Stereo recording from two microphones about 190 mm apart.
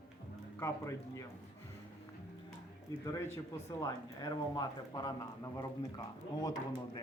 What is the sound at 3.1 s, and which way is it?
Speech, 15° left (ahead or behind).